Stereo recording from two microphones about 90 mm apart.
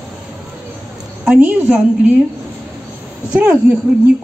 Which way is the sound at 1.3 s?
20° right (ahead or behind).